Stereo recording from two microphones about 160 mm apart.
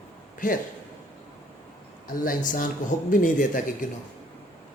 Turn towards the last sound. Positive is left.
turn(degrees=55)  # may be behind; listen again after turning